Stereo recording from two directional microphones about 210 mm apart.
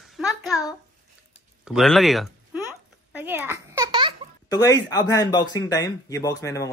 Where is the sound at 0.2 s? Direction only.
Centre (ahead or behind).